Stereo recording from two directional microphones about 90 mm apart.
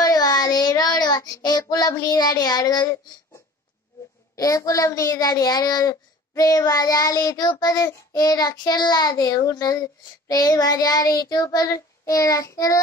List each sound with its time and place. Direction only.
0.0 s child singing: 45° left (ahead or behind)
4.4 s a child's voice: 35° left (ahead or behind)
7.6 s child singing: 45° left (ahead or behind)